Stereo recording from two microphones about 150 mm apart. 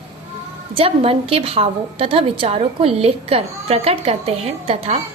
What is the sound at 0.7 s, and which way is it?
A woman's voice, 40° right (ahead or behind).